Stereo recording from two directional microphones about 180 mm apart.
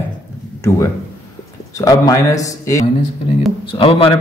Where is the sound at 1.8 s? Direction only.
20° left (ahead or behind).